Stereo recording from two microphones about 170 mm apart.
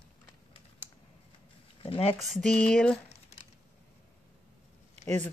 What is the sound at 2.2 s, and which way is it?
Speech, centre (ahead or behind).